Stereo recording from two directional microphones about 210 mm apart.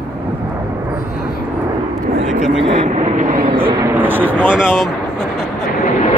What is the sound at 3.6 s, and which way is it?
Vehicle, 15° right (ahead or behind).